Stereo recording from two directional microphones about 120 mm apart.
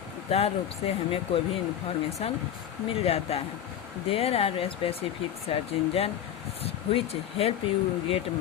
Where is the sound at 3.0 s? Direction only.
55° left (ahead or behind).